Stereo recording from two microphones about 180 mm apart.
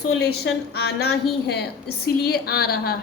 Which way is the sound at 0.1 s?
65° left (ahead or behind).